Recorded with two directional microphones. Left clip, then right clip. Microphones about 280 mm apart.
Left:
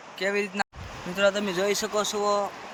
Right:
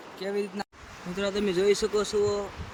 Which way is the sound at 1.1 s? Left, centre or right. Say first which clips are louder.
Left 4 dB; centre.